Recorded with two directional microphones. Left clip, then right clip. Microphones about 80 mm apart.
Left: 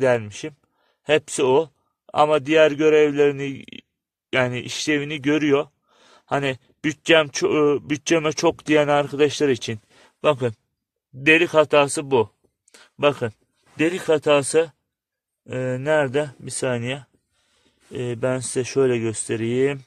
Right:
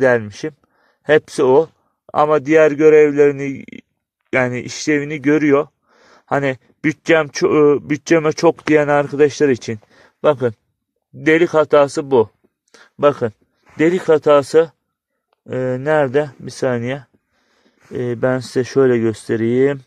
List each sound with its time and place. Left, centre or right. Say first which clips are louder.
0.5 s a sound: right 8 dB; right
1.2 s speech: right 5 dB; left
1.6 s a sound: right 7 dB; right
2.5 s speech: right 7 dB; centre
8.7 s speech: right 4 dB; centre
11.2 s speech: right 3 dB; right
13.7 s speech: right 6 dB; right